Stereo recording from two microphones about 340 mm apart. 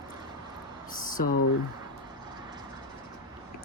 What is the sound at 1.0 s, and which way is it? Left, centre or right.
Speech, left.